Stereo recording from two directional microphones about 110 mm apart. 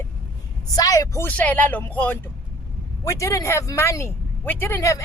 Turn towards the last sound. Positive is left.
turn(degrees=30)  # may be behind; listen again after turning